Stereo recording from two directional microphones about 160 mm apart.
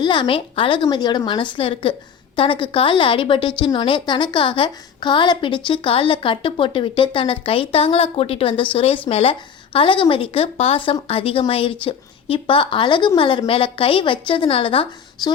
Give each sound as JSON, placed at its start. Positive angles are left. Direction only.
{"t": 0.0, "sound": "a woman's voice", "side_deg": 30}